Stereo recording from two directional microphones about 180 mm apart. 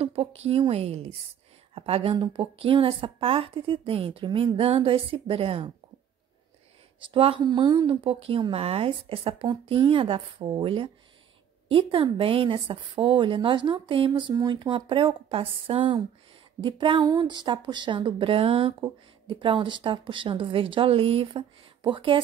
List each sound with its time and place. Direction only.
0.0 s a woman's voice: 35° right (ahead or behind)
7.1 s a woman's voice: 30° right (ahead or behind)